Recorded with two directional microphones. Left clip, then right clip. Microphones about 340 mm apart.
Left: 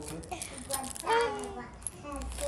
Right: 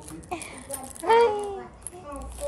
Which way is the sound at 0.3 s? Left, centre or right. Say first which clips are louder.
Right 9 dB; centre.